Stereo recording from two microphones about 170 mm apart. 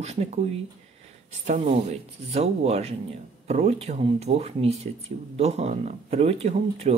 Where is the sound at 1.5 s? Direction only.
40° right (ahead or behind).